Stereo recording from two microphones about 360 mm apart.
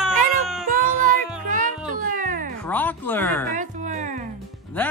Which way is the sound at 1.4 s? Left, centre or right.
Right.